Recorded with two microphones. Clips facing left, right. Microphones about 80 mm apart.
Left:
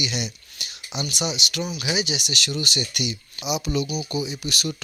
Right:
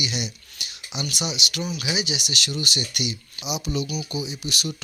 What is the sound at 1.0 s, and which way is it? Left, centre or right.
Speech, left.